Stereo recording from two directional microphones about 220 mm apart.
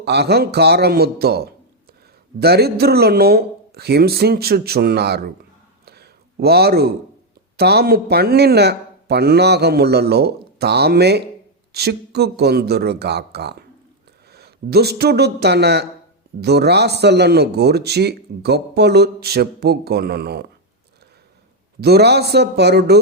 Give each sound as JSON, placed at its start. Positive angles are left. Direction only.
{"t": 0.0, "sound": "speech", "side_deg": -50}
{"t": 5.8, "sound": "a sound", "side_deg": -45}
{"t": 7.5, "sound": "speech", "side_deg": -45}
{"t": 21.8, "sound": "speech", "side_deg": -45}